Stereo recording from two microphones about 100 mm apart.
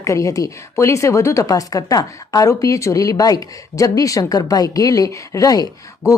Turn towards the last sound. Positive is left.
turn(degrees=35)  # may be behind; listen again after turning